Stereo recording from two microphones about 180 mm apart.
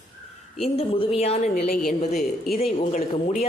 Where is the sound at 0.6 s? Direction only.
30° left (ahead or behind); by 1.9 s 50° left (ahead or behind).